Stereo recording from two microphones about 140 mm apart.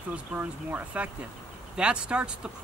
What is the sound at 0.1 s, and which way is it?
Speech, 10° right (ahead or behind).